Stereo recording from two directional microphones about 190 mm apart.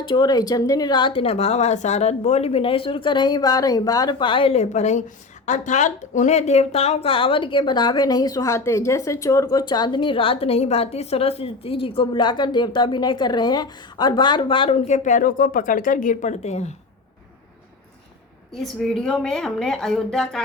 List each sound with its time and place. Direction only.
0.0 s a woman's voice: 25° left (ahead or behind)
18.5 s a woman's voice: centre (ahead or behind)